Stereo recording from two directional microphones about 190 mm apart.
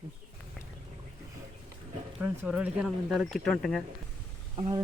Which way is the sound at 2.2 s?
5° right (ahead or behind).